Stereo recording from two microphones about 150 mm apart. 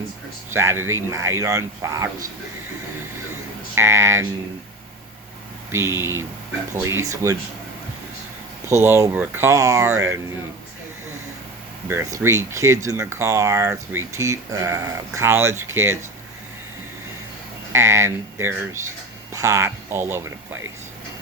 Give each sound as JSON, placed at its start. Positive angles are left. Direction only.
{"t": 0.5, "sound": "speech", "side_deg": -15}
{"t": 3.8, "sound": "speech", "side_deg": -15}
{"t": 5.7, "sound": "speech", "side_deg": -15}
{"t": 8.7, "sound": "speech", "side_deg": -15}
{"t": 11.9, "sound": "speech", "side_deg": -15}
{"t": 17.7, "sound": "speech", "side_deg": -15}